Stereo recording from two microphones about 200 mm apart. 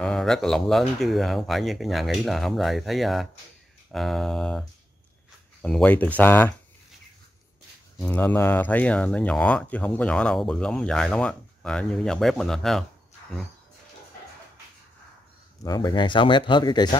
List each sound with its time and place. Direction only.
0.0 s speech: 5° left (ahead or behind)
8.0 s speech: 10° left (ahead or behind)
15.6 s speech: 20° left (ahead or behind)